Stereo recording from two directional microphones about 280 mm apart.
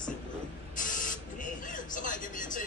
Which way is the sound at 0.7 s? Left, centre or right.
Left.